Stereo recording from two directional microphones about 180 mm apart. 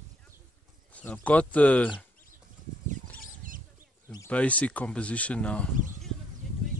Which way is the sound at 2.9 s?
45° right (ahead or behind).